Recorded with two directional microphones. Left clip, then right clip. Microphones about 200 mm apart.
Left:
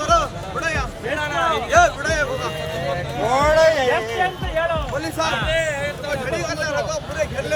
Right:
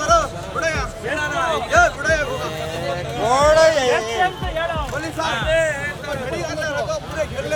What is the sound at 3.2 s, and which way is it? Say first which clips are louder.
Speech: right 2 dB; 35° right (ahead or behind).